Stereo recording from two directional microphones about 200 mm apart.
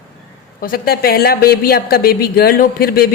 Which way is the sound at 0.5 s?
45° left (ahead or behind).